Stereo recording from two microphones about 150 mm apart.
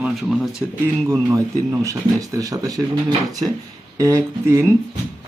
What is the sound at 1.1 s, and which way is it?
Speech, 15° right (ahead or behind).